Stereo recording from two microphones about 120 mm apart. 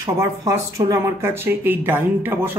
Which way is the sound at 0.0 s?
30° right (ahead or behind).